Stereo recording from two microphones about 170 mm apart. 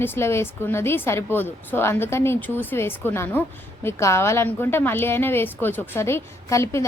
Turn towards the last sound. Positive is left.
turn(degrees=15)  # may be behind; listen again after turning